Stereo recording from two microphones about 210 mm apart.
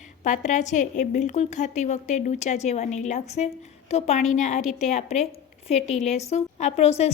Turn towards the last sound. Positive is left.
turn(degrees=30)  # may be behind; listen again after turning